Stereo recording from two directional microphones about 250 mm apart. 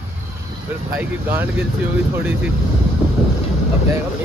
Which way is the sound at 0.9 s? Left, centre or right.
Centre.